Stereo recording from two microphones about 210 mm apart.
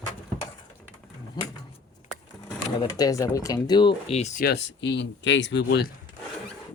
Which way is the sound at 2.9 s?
15° left (ahead or behind).